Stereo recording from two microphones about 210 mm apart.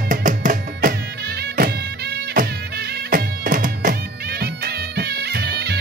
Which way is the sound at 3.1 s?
40° right (ahead or behind).